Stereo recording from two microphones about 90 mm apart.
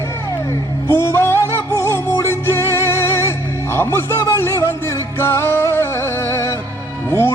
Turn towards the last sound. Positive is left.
turn(degrees=25)  # may be behind; listen again after turning